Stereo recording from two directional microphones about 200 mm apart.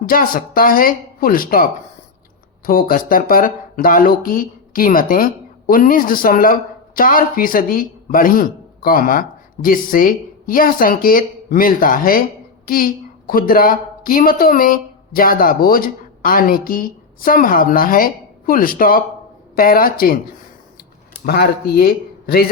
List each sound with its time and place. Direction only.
0.0 s speech: 45° left (ahead or behind)
21.2 s speech: 50° left (ahead or behind)